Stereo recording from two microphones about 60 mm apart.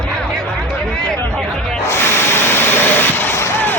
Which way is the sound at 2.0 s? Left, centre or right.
Left.